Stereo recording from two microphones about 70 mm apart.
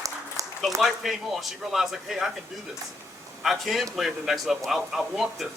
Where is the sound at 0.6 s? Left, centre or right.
Centre.